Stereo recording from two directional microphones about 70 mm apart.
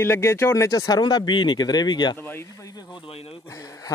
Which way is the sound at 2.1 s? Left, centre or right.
Left.